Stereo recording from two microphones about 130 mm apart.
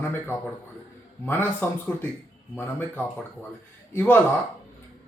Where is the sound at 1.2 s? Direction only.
15° left (ahead or behind).